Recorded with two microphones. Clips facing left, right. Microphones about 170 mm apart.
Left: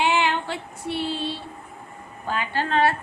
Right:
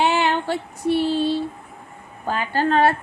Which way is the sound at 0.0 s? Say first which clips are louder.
Right 3 dB; 45° right (ahead or behind).